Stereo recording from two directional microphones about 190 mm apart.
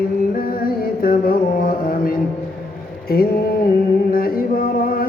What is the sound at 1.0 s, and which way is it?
Mantra, 50° left (ahead or behind).